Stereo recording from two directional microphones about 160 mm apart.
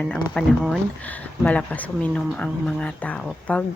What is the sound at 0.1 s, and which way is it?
Speech, centre (ahead or behind).